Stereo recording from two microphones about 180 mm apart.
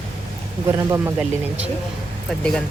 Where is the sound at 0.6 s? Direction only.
15° right (ahead or behind).